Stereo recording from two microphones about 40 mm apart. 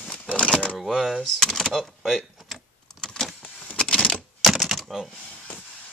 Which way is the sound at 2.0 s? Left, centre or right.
Centre.